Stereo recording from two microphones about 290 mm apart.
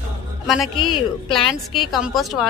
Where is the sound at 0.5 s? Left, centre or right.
Centre.